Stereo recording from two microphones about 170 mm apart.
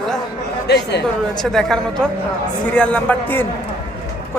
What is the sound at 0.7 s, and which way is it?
Speech, 80° left.